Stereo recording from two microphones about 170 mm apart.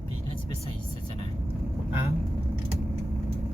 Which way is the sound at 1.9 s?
15° right (ahead or behind).